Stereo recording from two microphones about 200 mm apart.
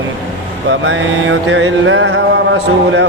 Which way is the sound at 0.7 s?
70° right (ahead or behind).